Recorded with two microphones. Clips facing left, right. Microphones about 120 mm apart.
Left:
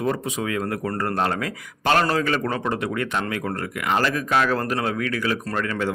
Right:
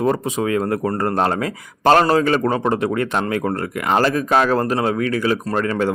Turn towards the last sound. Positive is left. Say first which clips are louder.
# right 5 dB
turn(degrees=-35)  # may be behind; listen again after turning